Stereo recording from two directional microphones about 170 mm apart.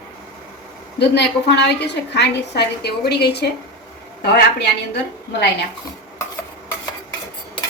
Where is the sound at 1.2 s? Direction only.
80° left.